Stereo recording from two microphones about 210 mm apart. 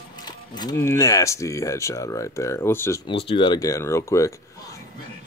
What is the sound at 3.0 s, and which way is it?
Speech, 25° left (ahead or behind).